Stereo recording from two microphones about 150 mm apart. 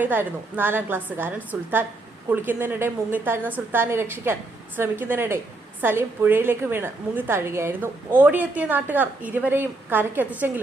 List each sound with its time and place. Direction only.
0.0 s a woman's voice: 10° right (ahead or behind)